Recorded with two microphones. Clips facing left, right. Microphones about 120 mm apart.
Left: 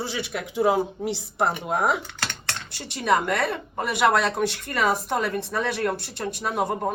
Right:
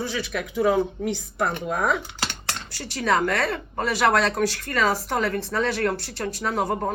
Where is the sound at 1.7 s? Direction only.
30° left (ahead or behind).